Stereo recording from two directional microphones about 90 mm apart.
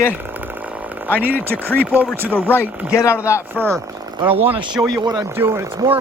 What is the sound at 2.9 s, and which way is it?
Speech, 30° left (ahead or behind).